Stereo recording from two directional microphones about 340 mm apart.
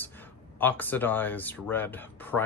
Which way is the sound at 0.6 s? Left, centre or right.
Centre.